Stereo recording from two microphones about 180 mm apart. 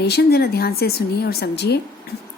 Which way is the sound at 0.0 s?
65° left (ahead or behind).